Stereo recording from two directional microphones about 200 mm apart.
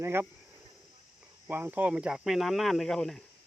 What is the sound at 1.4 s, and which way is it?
Speech, 10° right (ahead or behind).